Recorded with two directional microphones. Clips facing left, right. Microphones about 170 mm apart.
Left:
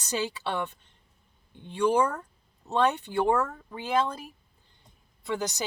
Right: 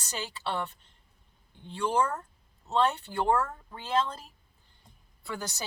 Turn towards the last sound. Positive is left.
turn(degrees=20)  # may be behind; listen again after turning